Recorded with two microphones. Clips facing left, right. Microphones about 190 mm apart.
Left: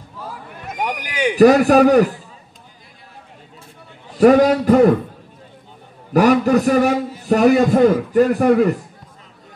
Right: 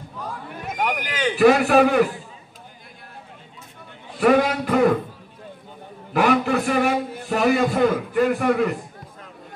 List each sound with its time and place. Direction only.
0.2 s a sound: 5° left (ahead or behind)
1.3 s a man's voice: 40° left (ahead or behind)
4.2 s a man's voice: 40° left (ahead or behind)
6.1 s a man's voice: 40° left (ahead or behind)